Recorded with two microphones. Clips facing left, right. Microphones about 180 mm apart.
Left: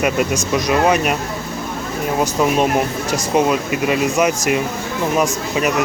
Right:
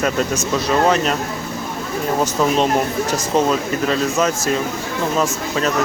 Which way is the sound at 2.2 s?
10° left (ahead or behind).